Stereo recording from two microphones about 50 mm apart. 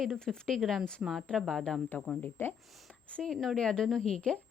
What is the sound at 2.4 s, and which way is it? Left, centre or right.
Speech, left.